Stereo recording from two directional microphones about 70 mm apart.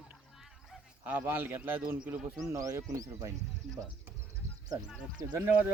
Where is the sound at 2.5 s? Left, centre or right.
Right.